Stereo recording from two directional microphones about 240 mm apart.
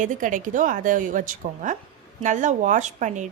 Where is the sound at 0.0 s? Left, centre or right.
Right.